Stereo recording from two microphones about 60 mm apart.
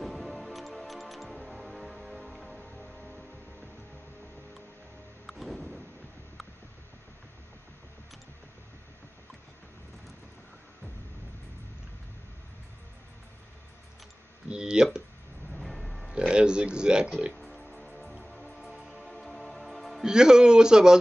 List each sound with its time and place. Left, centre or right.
0.0 s music: centre
5.2 s music: centre
14.5 s a man's voice: centre
15.5 s music: centre
16.1 s speech: centre
17.4 s music: centre
20.1 s a man's voice: centre